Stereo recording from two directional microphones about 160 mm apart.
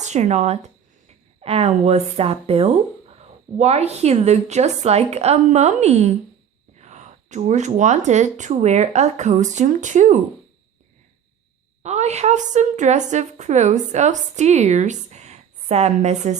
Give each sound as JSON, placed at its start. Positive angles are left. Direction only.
{"t": 0.0, "sound": "a woman's voice", "side_deg": -45}
{"t": 11.8, "sound": "a woman's voice", "side_deg": -45}